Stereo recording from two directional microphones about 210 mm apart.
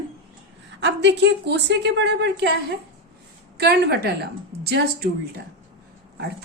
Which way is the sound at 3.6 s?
50° right (ahead or behind).